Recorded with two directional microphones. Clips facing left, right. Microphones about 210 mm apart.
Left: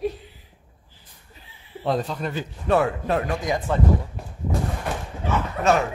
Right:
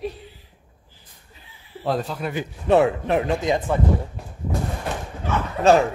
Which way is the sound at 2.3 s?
20° right (ahead or behind).